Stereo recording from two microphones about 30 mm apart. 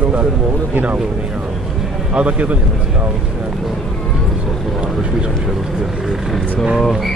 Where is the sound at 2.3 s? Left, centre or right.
Right.